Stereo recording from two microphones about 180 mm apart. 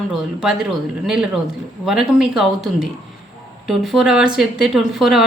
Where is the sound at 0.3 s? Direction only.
5° right (ahead or behind).